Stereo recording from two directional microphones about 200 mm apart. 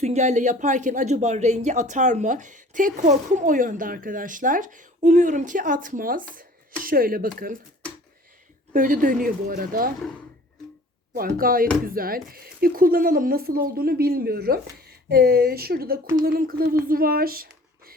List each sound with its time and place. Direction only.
0.0 s speech: 35° right (ahead or behind)
8.7 s speech: 40° right (ahead or behind)
11.1 s speech: 45° right (ahead or behind)